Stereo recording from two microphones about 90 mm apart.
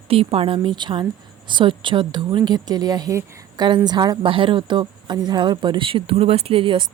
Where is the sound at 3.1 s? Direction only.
35° right (ahead or behind).